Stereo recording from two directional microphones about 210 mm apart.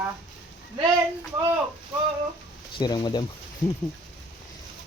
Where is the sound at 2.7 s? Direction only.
20° left (ahead or behind).